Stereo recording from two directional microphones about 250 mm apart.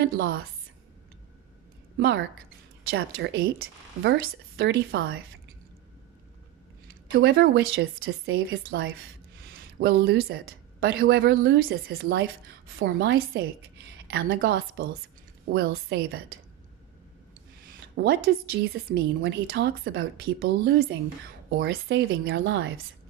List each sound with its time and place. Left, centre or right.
0.0 s speech: right
2.0 s a woman's voice: right
7.1 s speech: right
9.4 s speech: right
17.6 s a sound: right
18.9 s speech: right